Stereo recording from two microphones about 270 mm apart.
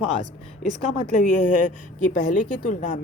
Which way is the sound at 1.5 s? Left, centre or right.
Left.